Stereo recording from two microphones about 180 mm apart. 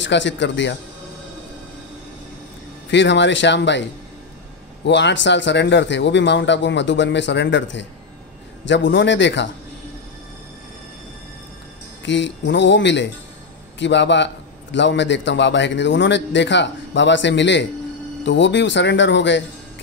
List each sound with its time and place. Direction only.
0.0 s a man's voice: 90° left
2.9 s a man's voice: 80° left
4.8 s a man's voice: 75° left (ahead or behind)
12.0 s a man's voice: 85° left